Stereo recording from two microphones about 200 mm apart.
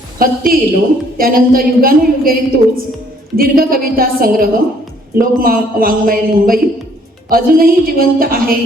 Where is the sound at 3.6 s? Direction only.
45° right (ahead or behind).